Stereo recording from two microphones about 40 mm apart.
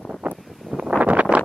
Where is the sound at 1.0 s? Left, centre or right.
Right.